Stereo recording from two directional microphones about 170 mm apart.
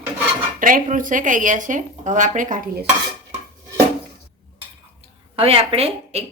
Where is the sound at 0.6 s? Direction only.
55° right (ahead or behind).